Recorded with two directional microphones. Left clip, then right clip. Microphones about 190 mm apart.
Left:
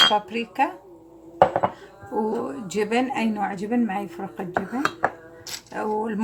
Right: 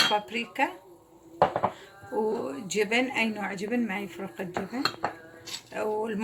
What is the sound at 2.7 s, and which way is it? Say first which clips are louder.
Speech: left 2 dB; 35° left (ahead or behind).